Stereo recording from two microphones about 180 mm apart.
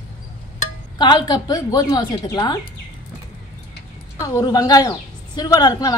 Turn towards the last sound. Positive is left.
turn(degrees=20)  # may be behind; listen again after turning